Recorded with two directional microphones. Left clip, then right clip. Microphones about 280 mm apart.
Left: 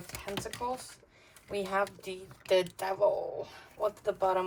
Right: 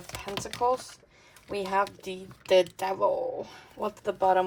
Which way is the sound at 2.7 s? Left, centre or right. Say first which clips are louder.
Right 2 dB; right.